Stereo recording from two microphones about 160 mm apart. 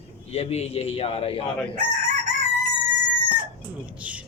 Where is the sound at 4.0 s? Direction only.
10° right (ahead or behind).